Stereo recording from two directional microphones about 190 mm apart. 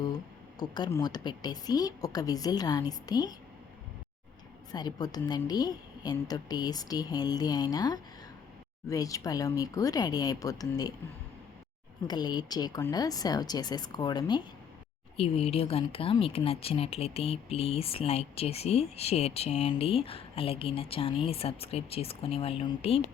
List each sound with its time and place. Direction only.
0.6 s a woman's voice: 20° left (ahead or behind)
4.7 s a woman's voice: 20° left (ahead or behind)
12.0 s a woman's voice: 20° left (ahead or behind)